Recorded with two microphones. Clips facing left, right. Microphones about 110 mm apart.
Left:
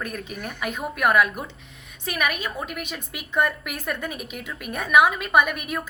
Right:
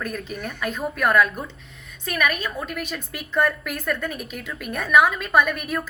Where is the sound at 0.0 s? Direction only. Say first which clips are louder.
Right 2 dB; 10° left (ahead or behind).